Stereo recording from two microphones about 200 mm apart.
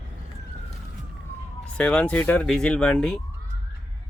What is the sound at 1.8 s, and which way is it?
Speech, 5° left (ahead or behind).